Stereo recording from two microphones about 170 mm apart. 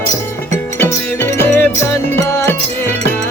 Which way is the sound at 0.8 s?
10° left (ahead or behind).